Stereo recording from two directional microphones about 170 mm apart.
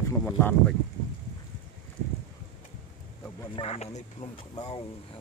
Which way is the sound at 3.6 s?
35° left (ahead or behind).